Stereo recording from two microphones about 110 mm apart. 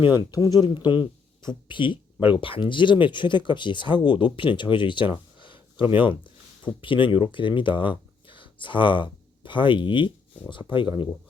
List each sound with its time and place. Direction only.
0.0 s speech: 45° left (ahead or behind)